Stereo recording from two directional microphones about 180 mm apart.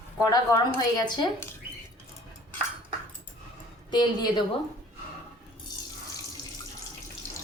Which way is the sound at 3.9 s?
25° left (ahead or behind).